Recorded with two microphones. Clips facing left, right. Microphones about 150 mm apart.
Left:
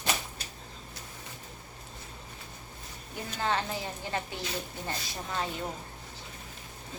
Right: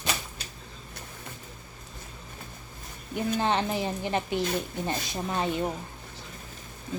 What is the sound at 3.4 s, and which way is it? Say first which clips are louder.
A woman's voice: right 2 dB; 20° right (ahead or behind).